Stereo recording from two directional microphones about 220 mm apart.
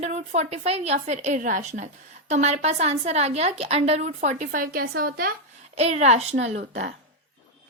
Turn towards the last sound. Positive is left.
turn(degrees=-35)  # may be behind; listen again after turning